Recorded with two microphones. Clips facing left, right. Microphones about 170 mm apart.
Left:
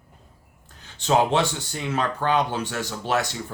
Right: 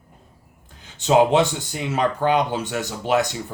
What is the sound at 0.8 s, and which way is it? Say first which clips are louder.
Speech: right 4 dB; 15° right (ahead or behind).